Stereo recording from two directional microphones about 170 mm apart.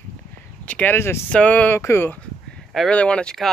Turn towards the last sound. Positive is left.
turn(degrees=5)  # may be behind; listen again after turning